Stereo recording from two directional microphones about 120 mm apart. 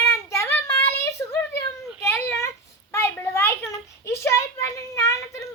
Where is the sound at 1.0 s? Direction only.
20° left (ahead or behind).